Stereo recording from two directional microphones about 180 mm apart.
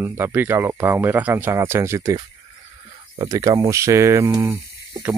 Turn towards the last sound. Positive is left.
turn(degrees=-15)  # may be behind; listen again after turning